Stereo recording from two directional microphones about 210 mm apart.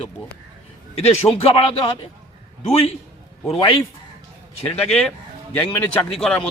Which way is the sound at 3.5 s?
25° left (ahead or behind).